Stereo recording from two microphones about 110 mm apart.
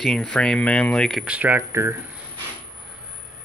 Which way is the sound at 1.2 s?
10° right (ahead or behind).